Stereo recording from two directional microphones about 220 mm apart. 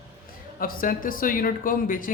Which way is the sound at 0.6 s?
40° left (ahead or behind).